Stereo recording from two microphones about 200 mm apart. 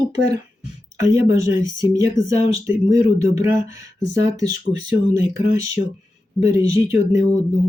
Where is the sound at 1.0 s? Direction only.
15° right (ahead or behind).